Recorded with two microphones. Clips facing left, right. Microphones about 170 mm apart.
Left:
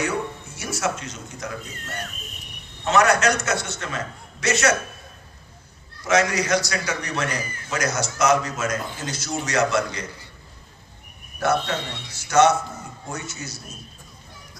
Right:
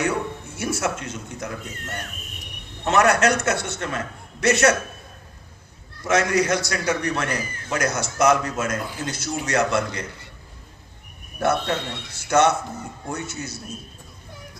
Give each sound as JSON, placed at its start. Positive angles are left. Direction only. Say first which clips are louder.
{"t": 0.5, "sound": "a man's voice", "louder": "right 1 dB", "side_deg": -55}
{"t": 2.8, "sound": "a man's voice", "louder": "right 1 dB", "side_deg": -55}
{"t": 6.1, "sound": "a man's voice", "louder": "even", "side_deg": -55}
{"t": 11.4, "sound": "a man's voice", "louder": "even", "side_deg": -55}